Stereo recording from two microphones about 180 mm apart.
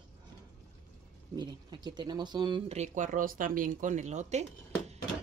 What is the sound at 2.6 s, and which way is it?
Speech, 40° right (ahead or behind).